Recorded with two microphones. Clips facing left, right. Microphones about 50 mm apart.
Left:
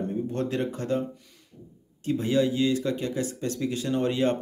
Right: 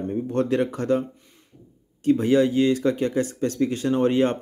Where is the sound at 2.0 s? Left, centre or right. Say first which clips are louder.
Right 6 dB; right.